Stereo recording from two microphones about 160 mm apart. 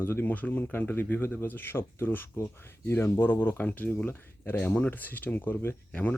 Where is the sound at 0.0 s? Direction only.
15° left (ahead or behind).